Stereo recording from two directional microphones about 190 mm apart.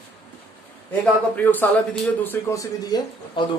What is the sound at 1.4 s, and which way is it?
Speech, 10° left (ahead or behind).